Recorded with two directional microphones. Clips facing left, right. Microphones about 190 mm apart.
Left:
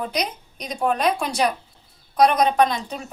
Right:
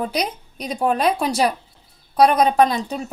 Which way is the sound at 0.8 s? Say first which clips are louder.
Right 2 dB; 35° right (ahead or behind).